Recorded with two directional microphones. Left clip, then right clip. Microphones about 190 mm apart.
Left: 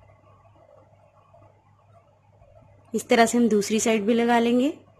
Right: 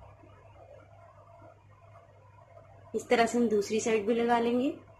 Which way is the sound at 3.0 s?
60° left (ahead or behind).